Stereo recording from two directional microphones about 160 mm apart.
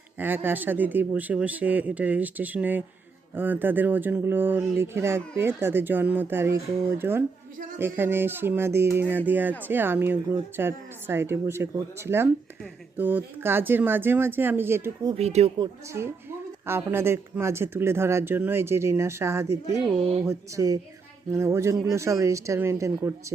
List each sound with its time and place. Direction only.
0.2 s speech: 10° right (ahead or behind)
15.2 s speech: 40° right (ahead or behind)
15.9 s speech: 15° right (ahead or behind)